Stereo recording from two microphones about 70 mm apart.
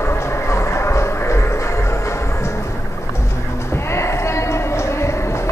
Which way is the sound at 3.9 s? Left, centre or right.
Left.